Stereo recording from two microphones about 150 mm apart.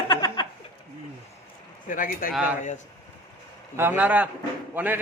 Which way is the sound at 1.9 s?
70° left (ahead or behind).